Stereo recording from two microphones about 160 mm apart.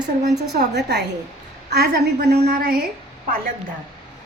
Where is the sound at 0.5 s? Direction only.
90° right.